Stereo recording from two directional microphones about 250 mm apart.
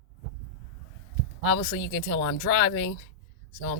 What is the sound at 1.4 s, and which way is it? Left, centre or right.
Speech, left.